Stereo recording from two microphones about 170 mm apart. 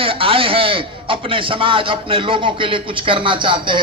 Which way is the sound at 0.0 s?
35° right (ahead or behind).